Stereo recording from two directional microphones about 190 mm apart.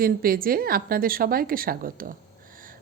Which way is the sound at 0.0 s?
50° right (ahead or behind).